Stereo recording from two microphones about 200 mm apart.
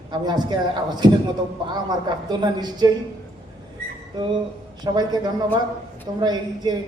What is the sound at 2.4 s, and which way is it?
Speech, 20° right (ahead or behind).